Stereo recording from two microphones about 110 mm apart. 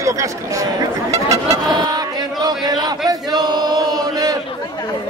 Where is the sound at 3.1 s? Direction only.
40° right (ahead or behind).